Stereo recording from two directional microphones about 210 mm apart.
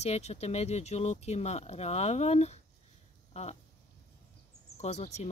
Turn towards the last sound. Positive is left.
turn(degrees=30)  # may be behind; listen again after turning